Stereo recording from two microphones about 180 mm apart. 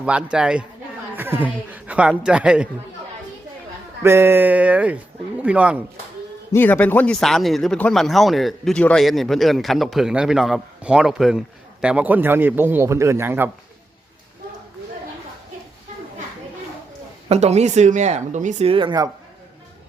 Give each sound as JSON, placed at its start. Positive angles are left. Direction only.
{"t": 0.0, "sound": "a woman's voice", "side_deg": -5}
{"t": 4.0, "sound": "a woman's voice", "side_deg": -15}
{"t": 6.5, "sound": "speech", "side_deg": 10}
{"t": 17.2, "sound": "speech", "side_deg": -35}